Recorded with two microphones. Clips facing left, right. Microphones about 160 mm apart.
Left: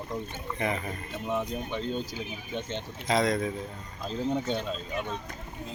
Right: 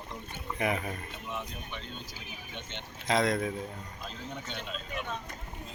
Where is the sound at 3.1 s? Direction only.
Centre (ahead or behind).